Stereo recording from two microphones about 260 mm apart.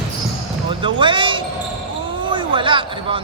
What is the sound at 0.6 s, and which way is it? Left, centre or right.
Speech, centre.